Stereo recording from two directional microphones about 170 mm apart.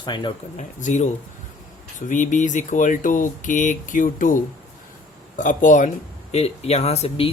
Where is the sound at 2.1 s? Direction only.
45° left (ahead or behind).